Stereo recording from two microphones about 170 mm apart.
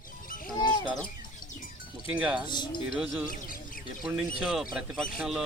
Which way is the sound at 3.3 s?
55° left (ahead or behind).